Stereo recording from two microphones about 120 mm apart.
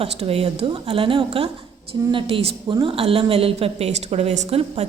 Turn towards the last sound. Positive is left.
turn(degrees=-60)  # may be behind; listen again after turning